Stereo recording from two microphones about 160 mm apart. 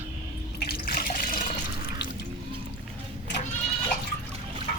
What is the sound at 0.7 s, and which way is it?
Water, 70° left (ahead or behind).